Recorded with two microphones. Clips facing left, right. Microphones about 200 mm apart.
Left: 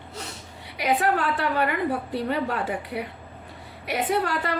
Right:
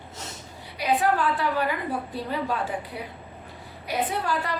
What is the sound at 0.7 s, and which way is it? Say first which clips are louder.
A woman's voice: even; 70° left (ahead or behind).